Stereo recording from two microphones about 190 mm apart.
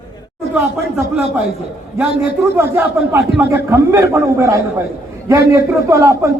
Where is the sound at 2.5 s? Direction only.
10° right (ahead or behind).